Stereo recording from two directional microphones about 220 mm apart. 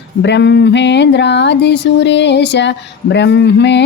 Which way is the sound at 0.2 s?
50° left (ahead or behind).